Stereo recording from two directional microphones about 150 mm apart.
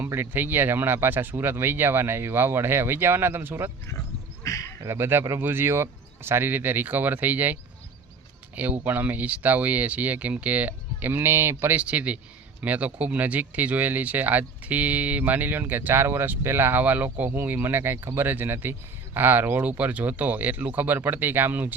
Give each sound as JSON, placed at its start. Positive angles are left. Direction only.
{"t": 0.0, "sound": "speech", "side_deg": -15}
{"t": 4.4, "sound": "speech", "side_deg": 20}
{"t": 4.8, "sound": "speech", "side_deg": -15}
{"t": 8.8, "sound": "speech", "side_deg": -10}